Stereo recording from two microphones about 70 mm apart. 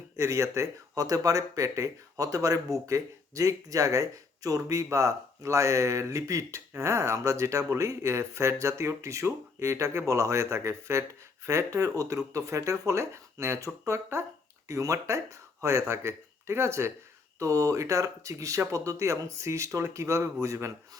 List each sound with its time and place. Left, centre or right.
0.2 s speech: right
17.4 s speech: right